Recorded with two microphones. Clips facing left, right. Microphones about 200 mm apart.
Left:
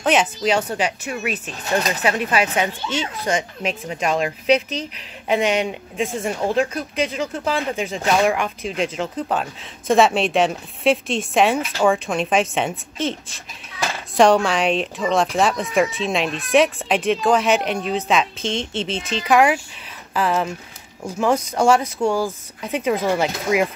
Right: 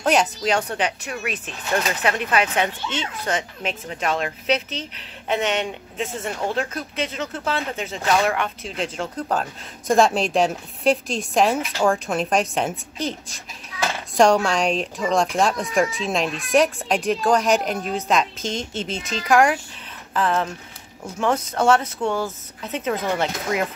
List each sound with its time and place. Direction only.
0.0 s speech: centre (ahead or behind)
14.1 s speech: centre (ahead or behind)
18.4 s speech: 30° left (ahead or behind)
19.2 s speech: 5° left (ahead or behind)